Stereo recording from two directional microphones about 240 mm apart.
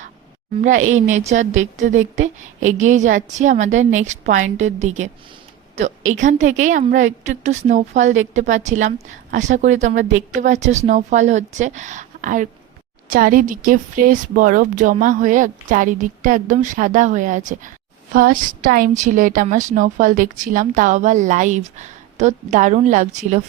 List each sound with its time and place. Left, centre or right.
0.6 s a woman's voice: right